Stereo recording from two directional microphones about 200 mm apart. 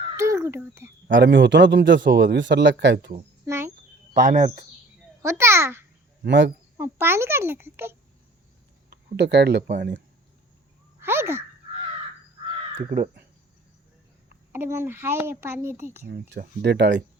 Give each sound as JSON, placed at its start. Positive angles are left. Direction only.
{"t": 0.2, "sound": "a child's voice", "side_deg": -15}
{"t": 1.1, "sound": "a man's voice", "side_deg": -65}
{"t": 3.4, "sound": "a sound", "side_deg": -15}
{"t": 4.1, "sound": "speech", "side_deg": -40}
{"t": 5.2, "sound": "a child's voice", "side_deg": -15}
{"t": 6.2, "sound": "a man's voice", "side_deg": -60}
{"t": 6.7, "sound": "a child's voice", "side_deg": -10}
{"t": 8.9, "sound": "speech", "side_deg": -55}
{"t": 11.0, "sound": "babbling", "side_deg": -10}
{"t": 12.4, "sound": "crow", "side_deg": -25}
{"t": 12.9, "sound": "speech", "side_deg": -45}
{"t": 14.5, "sound": "a child's voice", "side_deg": -10}
{"t": 16.3, "sound": "a man's voice", "side_deg": -55}